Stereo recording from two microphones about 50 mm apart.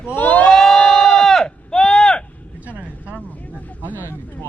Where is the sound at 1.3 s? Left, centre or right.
Centre.